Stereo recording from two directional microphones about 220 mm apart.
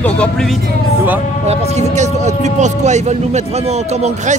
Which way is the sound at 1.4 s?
30° right (ahead or behind).